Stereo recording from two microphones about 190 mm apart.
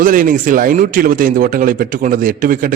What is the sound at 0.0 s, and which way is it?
Speech, 45° right (ahead or behind).